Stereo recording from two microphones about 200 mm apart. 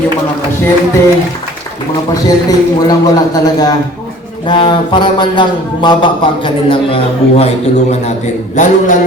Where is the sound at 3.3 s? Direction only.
20° left (ahead or behind).